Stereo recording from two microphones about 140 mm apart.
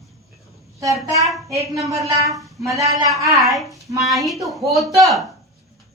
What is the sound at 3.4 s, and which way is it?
Speech, centre (ahead or behind).